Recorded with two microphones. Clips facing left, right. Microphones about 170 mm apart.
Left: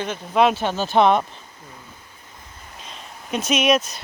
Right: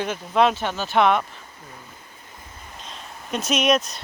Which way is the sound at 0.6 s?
20° left (ahead or behind).